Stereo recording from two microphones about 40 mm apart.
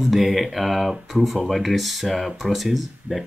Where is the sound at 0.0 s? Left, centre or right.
Centre.